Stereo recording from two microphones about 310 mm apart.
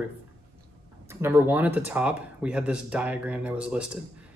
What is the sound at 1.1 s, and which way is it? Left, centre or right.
Speech, centre.